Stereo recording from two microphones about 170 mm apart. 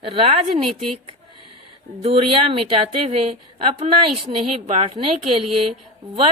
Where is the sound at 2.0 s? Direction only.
35° right (ahead or behind).